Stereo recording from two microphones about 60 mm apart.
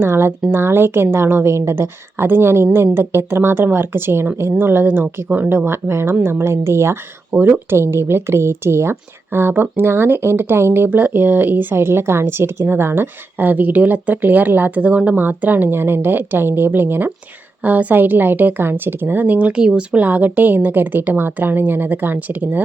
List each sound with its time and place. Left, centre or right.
0.0 s a woman's voice: right
5.5 s a woman's voice: right
7.3 s speech: right
7.7 s speech: right
10.8 s speech: right
14.8 s speech: centre
15.1 s speech: right
19.2 s speech: right